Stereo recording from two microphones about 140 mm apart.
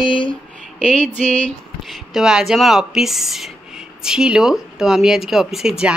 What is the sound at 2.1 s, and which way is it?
Speech, 5° right (ahead or behind).